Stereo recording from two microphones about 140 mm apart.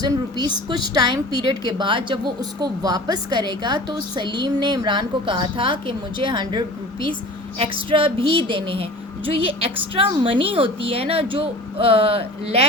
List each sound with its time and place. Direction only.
0.0 s a woman's voice: 30° right (ahead or behind)